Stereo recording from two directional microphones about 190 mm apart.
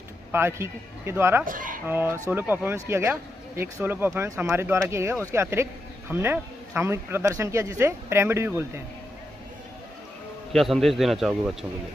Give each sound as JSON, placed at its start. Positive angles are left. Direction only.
{"t": 0.3, "sound": "speech", "side_deg": -15}
{"t": 1.4, "sound": "speech", "side_deg": -45}
{"t": 1.9, "sound": "speech", "side_deg": -10}
{"t": 10.5, "sound": "a man's voice", "side_deg": 0}